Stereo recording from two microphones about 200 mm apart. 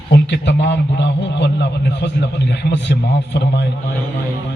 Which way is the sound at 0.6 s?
60° left (ahead or behind).